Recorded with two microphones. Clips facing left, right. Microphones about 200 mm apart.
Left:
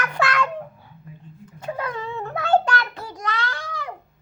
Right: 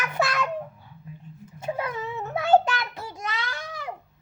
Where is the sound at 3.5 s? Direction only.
25° right (ahead or behind).